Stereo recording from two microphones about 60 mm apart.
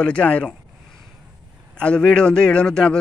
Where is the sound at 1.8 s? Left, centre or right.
Centre.